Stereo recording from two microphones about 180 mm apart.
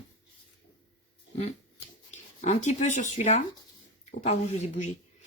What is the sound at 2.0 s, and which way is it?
Speech, 40° left (ahead or behind).